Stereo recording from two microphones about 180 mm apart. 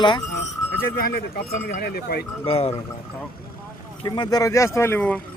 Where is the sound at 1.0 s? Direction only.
55° left (ahead or behind).